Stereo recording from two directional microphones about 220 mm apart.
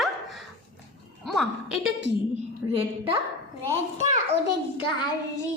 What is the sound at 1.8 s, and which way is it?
Speech, 55° right (ahead or behind).